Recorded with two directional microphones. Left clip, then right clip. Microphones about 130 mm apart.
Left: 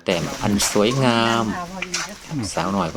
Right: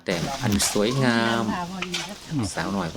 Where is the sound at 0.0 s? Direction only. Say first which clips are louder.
Left 4 dB; 20° left (ahead or behind).